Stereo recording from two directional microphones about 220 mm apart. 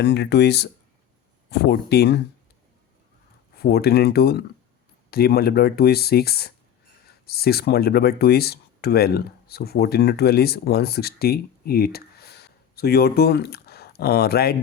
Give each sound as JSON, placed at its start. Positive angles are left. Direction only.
{"t": 0.0, "sound": "speech", "side_deg": 50}
{"t": 3.6, "sound": "speech", "side_deg": 45}